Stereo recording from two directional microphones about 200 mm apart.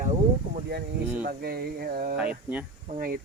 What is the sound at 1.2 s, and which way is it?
Speech, 50° right (ahead or behind).